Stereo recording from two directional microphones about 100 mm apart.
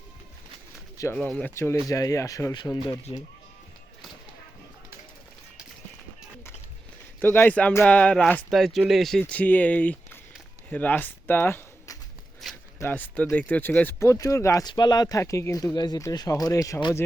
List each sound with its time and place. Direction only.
1.0 s speech: 35° left (ahead or behind)
7.2 s speech: 20° left (ahead or behind)
8.4 s speech: centre (ahead or behind)
9.3 s speech: 15° left (ahead or behind)
12.4 s a sound: centre (ahead or behind)
12.8 s speech: 15° left (ahead or behind)
14.0 s speech: 30° left (ahead or behind)
14.6 s speech: 45° left (ahead or behind)